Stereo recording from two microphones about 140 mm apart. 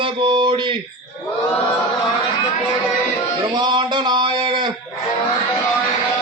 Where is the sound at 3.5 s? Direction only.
30° right (ahead or behind).